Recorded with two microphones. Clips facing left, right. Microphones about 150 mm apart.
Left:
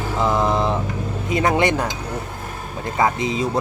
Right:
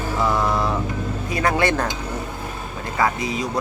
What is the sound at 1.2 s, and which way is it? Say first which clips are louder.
Speech: left 2 dB; 20° left (ahead or behind).